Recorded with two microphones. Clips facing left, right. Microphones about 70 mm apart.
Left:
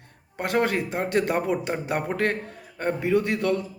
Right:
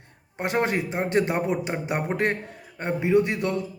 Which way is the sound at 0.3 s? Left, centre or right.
Right.